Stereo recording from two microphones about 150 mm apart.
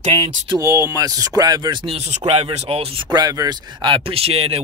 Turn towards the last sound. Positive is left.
turn(degrees=-45)  # may be behind; listen again after turning